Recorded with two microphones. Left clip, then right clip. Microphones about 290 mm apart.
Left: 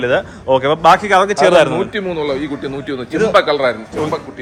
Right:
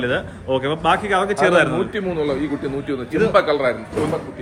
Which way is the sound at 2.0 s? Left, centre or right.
Left.